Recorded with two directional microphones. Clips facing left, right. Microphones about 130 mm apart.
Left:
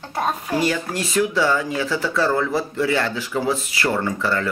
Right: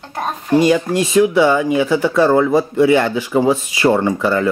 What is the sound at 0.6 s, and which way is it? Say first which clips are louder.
Speech: right 11 dB; 15° right (ahead or behind).